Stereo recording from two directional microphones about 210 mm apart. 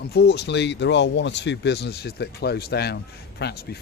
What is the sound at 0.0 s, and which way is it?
Speech, 50° left (ahead or behind).